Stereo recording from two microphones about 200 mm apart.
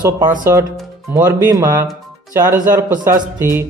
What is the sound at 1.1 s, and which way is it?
Speech, 15° right (ahead or behind).